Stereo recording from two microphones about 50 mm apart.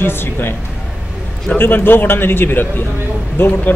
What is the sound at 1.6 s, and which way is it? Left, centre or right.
Speech, left.